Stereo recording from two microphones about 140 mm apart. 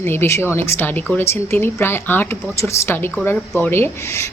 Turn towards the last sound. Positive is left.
turn(degrees=20)  # may be behind; listen again after turning